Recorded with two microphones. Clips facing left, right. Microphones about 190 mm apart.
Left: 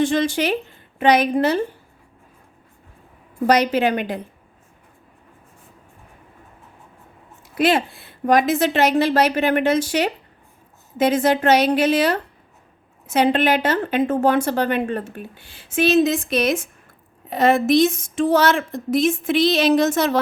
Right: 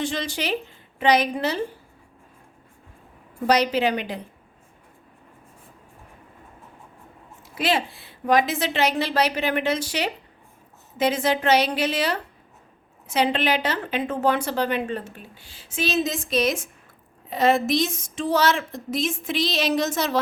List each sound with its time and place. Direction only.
0.0 s a woman's voice: 50° left (ahead or behind)
3.4 s a woman's voice: 55° left (ahead or behind)
7.5 s a woman's voice: 50° left (ahead or behind)